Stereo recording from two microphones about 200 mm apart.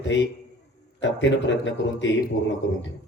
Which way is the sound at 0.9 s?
65° left (ahead or behind).